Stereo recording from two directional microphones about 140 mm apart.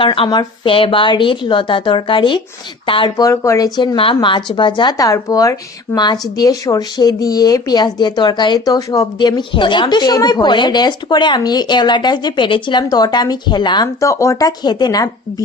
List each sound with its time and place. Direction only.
0.0 s speech: 35° left (ahead or behind)
3.2 s speech: 20° left (ahead or behind)
3.9 s speech: 35° left (ahead or behind)